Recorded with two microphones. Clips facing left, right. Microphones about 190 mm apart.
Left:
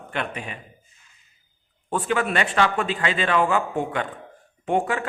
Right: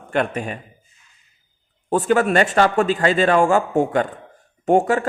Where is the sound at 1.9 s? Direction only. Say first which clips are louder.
Right 7 dB; 40° right (ahead or behind).